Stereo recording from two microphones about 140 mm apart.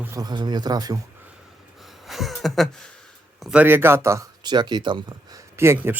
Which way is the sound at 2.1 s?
Centre (ahead or behind).